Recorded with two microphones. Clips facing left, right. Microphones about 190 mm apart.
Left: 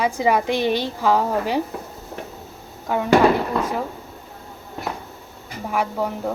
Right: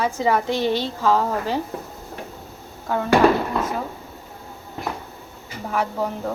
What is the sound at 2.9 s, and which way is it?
Speech, 15° left (ahead or behind).